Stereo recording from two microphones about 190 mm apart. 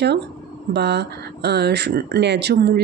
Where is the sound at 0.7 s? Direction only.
60° right (ahead or behind).